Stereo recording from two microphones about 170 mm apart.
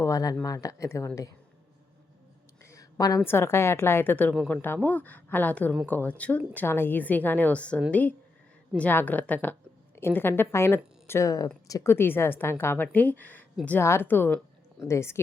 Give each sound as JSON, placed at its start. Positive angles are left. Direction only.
{"t": 0.0, "sound": "speech", "side_deg": 20}
{"t": 2.6, "sound": "a sound", "side_deg": 20}
{"t": 3.2, "sound": "a woman's voice", "side_deg": 15}